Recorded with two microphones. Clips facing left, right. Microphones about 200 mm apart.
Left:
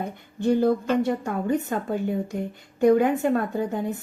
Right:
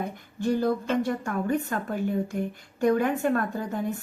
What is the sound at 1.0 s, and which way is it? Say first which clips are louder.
A woman's voice: left 2 dB; 20° left (ahead or behind).